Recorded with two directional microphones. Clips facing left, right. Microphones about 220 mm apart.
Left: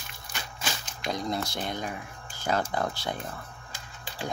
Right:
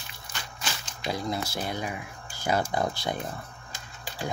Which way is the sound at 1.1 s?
5° right (ahead or behind).